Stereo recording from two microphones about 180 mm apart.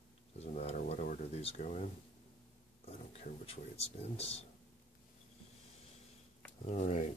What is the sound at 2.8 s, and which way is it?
Speech, 35° left (ahead or behind).